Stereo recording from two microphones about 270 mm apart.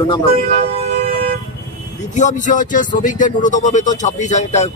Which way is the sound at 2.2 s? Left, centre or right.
Left.